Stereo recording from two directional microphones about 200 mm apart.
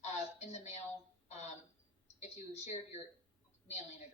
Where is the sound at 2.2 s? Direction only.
35° left (ahead or behind).